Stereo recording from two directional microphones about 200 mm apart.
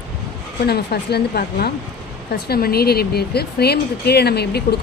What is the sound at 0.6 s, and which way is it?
Speech, 55° left (ahead or behind).